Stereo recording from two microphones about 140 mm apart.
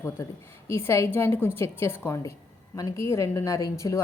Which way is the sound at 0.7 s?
20° left (ahead or behind).